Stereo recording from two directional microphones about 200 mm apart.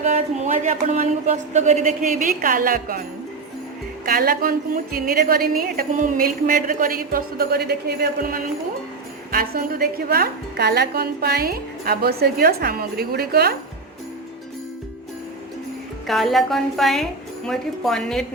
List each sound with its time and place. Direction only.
0.0 s speech: 35° right (ahead or behind)
4.0 s a woman's voice: 50° right (ahead or behind)
16.0 s speech: centre (ahead or behind)